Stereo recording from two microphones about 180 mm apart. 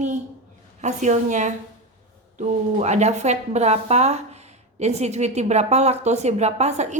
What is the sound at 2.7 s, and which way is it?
A woman's voice, 40° right (ahead or behind).